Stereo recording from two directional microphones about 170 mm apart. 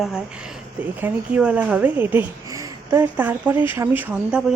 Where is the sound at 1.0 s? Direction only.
10° right (ahead or behind).